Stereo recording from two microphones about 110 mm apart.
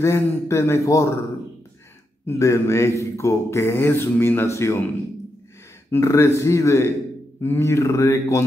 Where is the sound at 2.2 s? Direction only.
25° left (ahead or behind).